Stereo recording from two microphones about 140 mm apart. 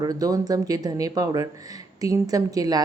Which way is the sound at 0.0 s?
25° right (ahead or behind).